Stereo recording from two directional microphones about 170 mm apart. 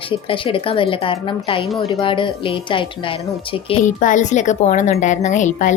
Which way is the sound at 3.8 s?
50° left (ahead or behind).